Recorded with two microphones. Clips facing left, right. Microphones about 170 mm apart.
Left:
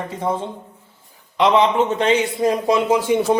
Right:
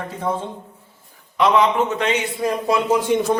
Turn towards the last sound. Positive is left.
turn(degrees=10)  # may be behind; listen again after turning